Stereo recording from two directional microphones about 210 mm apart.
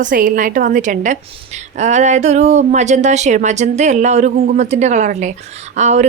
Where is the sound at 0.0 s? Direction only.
40° right (ahead or behind).